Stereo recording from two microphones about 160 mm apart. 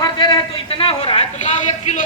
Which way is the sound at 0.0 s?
25° left (ahead or behind).